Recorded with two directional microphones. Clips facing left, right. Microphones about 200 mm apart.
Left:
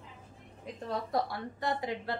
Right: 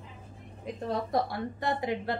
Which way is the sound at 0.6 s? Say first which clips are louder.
Right 4 dB; 20° right (ahead or behind).